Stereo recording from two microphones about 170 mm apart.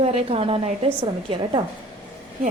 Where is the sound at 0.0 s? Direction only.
35° right (ahead or behind).